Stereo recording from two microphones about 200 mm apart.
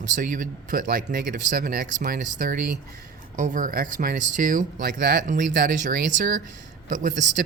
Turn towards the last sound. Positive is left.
turn(degrees=-40)  # may be behind; listen again after turning